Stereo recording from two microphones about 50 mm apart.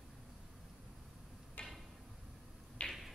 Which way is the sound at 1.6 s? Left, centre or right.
Left.